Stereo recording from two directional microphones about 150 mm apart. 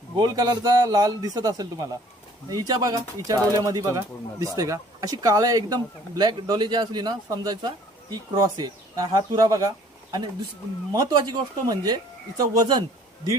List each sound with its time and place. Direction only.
0.2 s speech: 30° right (ahead or behind)